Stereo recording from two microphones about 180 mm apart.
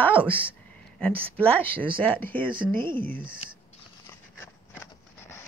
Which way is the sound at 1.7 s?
30° right (ahead or behind).